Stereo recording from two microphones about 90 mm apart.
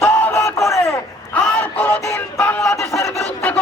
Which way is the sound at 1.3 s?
15° left (ahead or behind).